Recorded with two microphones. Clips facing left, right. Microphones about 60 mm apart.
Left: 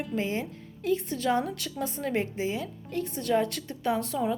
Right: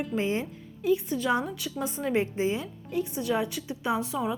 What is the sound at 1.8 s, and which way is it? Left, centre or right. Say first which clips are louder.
Speech: right 2 dB; centre.